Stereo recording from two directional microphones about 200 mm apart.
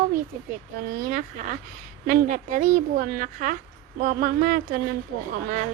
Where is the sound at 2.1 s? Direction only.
40° right (ahead or behind).